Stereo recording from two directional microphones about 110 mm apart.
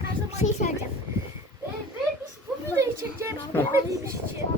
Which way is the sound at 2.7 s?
25° right (ahead or behind).